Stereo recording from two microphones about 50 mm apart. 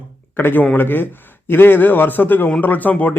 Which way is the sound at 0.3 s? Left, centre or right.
Left.